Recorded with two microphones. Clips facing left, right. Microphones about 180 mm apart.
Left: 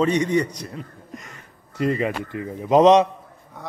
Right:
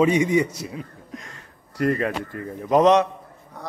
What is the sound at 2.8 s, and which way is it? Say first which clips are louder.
Speech: left 3 dB; 25° left (ahead or behind).